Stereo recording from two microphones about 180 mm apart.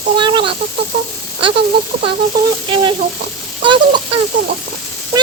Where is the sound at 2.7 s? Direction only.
30° right (ahead or behind).